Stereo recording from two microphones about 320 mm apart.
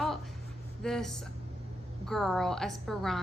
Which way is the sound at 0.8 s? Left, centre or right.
Centre.